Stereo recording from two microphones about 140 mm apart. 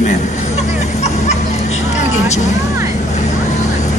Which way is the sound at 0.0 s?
55° left (ahead or behind).